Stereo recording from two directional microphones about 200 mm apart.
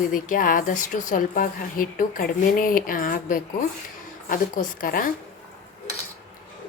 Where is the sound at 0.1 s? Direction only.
40° left (ahead or behind).